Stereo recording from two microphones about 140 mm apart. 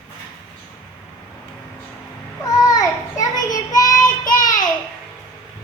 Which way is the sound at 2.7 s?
25° left (ahead or behind).